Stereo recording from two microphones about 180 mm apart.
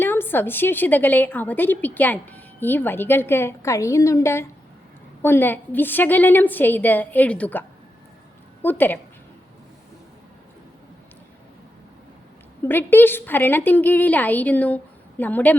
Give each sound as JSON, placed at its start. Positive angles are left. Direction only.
{"t": 0.0, "sound": "a woman's voice", "side_deg": 10}
{"t": 8.6, "sound": "a woman's voice", "side_deg": 10}
{"t": 12.6, "sound": "a woman's voice", "side_deg": 10}